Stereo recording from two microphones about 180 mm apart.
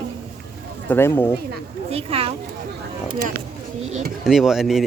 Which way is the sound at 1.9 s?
35° right (ahead or behind).